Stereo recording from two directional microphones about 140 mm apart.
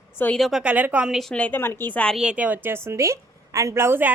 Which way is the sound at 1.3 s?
10° left (ahead or behind).